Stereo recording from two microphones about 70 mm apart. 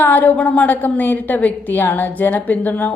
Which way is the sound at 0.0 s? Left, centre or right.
Left.